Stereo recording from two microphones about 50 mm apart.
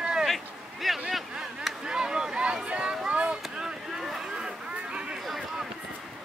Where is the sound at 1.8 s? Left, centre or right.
Centre.